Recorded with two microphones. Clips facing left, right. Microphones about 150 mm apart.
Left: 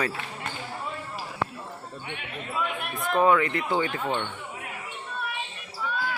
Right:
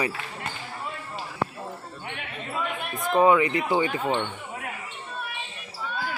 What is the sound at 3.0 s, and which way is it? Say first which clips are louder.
Speech: right 2 dB; 10° right (ahead or behind).